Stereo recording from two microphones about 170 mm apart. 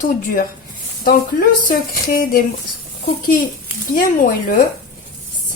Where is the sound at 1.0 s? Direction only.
60° left (ahead or behind).